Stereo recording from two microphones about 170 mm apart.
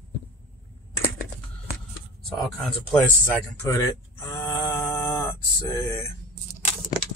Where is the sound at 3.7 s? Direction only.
20° left (ahead or behind).